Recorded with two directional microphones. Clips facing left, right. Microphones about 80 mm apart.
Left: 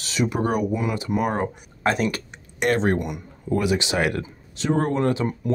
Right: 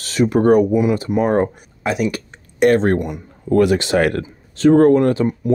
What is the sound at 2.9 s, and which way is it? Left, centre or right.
Speech, right.